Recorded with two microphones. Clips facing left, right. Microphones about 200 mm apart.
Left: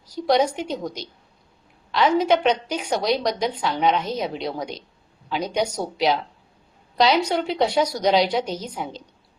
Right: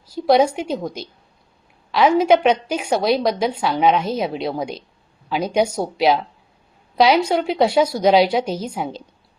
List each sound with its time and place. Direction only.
0.1 s a woman's voice: 10° right (ahead or behind)
7.3 s a woman's voice: 10° right (ahead or behind)